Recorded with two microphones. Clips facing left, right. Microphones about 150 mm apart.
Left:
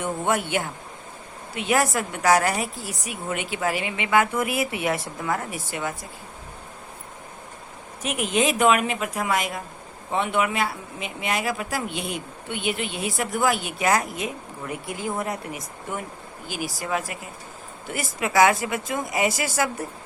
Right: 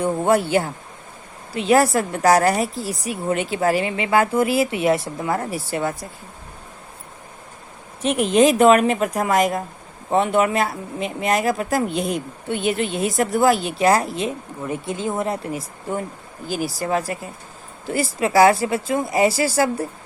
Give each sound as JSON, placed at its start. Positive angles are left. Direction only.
{"t": 0.0, "sound": "speech", "side_deg": -35}
{"t": 8.0, "sound": "speech", "side_deg": -35}